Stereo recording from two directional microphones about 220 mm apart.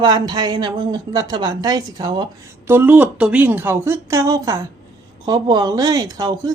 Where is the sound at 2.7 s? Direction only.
10° right (ahead or behind).